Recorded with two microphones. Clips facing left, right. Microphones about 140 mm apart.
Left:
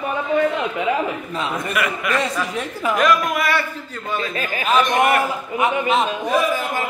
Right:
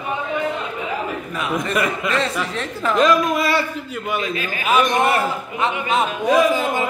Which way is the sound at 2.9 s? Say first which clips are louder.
Right 2 dB; 25° right (ahead or behind).